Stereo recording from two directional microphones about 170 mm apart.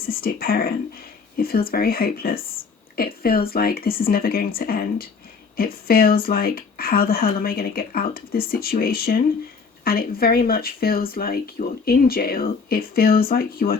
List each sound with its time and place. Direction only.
0.0 s speech: 60° left (ahead or behind)